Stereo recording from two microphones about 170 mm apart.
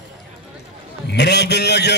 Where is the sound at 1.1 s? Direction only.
80° left.